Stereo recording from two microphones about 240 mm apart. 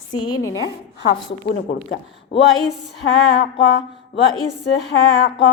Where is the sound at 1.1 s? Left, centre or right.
Left.